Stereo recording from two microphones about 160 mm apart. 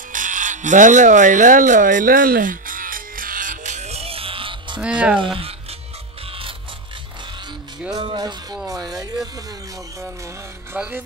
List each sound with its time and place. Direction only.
0.1 s electric toothbrush: 55° right (ahead or behind); by 4.8 s 30° right (ahead or behind)
4.8 s speech: 5° right (ahead or behind)
5.2 s music: 35° right (ahead or behind)
7.9 s music: 25° right (ahead or behind)
10.8 s speech: 10° right (ahead or behind)